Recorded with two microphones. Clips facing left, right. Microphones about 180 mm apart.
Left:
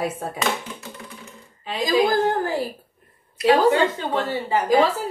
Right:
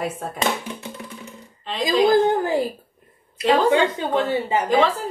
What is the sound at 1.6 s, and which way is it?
Speech, 10° left (ahead or behind).